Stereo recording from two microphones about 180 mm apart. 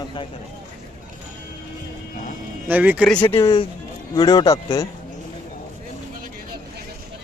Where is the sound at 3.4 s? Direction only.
20° left (ahead or behind).